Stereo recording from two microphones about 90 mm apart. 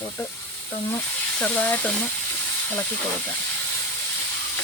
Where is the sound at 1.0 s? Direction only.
20° left (ahead or behind).